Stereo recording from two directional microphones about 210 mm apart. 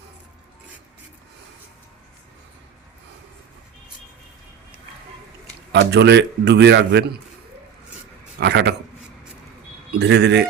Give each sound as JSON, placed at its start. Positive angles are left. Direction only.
{"t": 5.7, "sound": "a man's voice", "side_deg": -55}
{"t": 8.4, "sound": "a man's voice", "side_deg": -55}
{"t": 10.0, "sound": "a man's voice", "side_deg": -55}